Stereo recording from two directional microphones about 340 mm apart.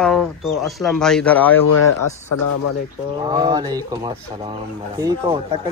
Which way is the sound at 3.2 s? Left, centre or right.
Centre.